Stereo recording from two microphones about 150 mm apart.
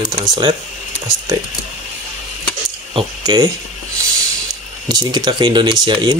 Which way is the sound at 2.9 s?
30° right (ahead or behind).